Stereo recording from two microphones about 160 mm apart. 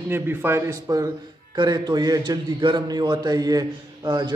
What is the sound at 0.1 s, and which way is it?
A man's voice, 15° right (ahead or behind).